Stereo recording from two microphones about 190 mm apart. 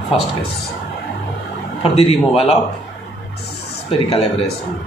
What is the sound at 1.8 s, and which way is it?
Speech, 30° left (ahead or behind).